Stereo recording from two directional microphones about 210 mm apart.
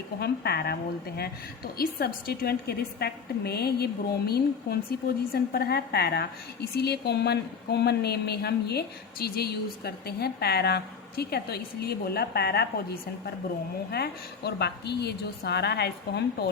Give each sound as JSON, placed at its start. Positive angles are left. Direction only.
{"t": 0.2, "sound": "a woman's voice", "side_deg": 50}